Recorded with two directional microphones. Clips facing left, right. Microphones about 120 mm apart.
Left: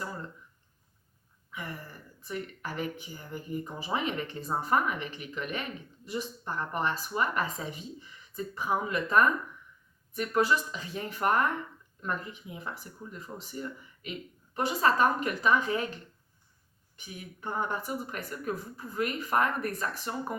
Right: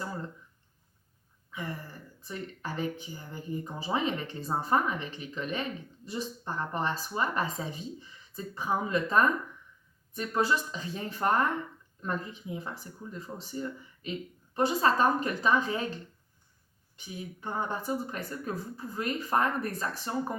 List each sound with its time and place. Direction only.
2.2 s speech: 30° right (ahead or behind)
17.4 s speech: 25° right (ahead or behind)